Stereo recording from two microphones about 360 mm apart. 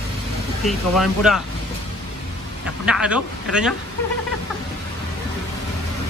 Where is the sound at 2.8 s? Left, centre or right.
Centre.